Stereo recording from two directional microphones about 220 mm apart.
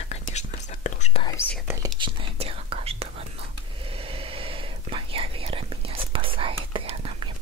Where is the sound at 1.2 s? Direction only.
10° left (ahead or behind).